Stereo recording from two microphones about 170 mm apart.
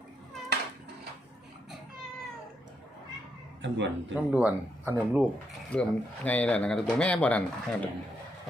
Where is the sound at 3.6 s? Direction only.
90° right.